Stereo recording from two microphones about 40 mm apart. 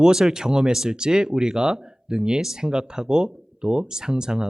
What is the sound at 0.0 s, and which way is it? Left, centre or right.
Speech, centre.